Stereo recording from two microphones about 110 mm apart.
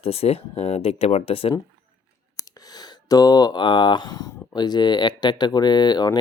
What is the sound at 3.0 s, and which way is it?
Speech, 35° left (ahead or behind).